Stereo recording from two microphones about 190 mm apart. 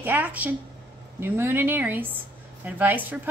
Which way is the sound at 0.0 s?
10° right (ahead or behind).